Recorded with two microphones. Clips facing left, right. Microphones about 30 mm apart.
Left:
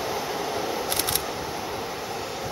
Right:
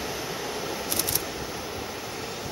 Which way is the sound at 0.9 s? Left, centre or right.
Left.